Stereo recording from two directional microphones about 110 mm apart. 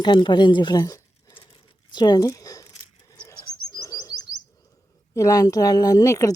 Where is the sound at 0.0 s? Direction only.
45° left (ahead or behind).